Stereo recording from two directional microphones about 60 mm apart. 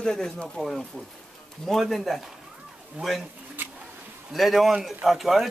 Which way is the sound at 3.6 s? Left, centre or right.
Right.